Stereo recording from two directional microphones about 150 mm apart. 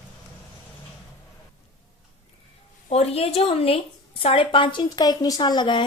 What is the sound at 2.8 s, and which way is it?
Speech, 45° left (ahead or behind).